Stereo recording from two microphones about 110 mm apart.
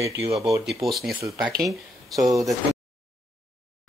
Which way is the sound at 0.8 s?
Centre (ahead or behind).